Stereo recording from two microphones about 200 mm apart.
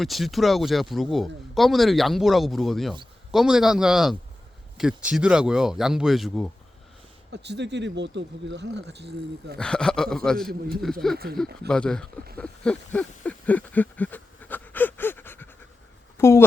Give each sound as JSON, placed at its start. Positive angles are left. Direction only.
{"t": 0.0, "sound": "speech", "side_deg": 0}
{"t": 7.3, "sound": "speech", "side_deg": -60}
{"t": 9.6, "sound": "speech", "side_deg": 5}
{"t": 11.7, "sound": "speech", "side_deg": 5}
{"t": 12.4, "sound": "a sound", "side_deg": 5}
{"t": 16.1, "sound": "speech", "side_deg": 15}